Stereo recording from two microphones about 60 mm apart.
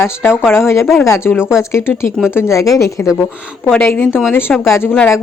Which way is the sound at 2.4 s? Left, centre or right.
Left.